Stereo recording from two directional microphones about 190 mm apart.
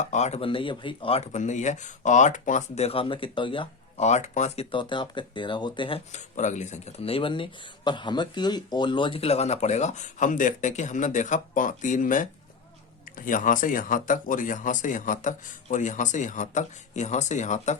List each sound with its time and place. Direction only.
0.0 s speech: 40° left (ahead or behind)
6.1 s speech: 40° left (ahead or behind)